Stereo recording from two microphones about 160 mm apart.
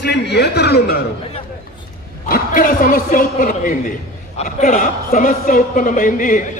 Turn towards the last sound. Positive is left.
turn(degrees=55)  # may be behind; listen again after turning